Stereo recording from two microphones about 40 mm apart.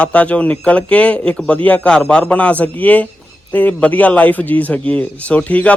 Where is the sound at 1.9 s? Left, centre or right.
Left.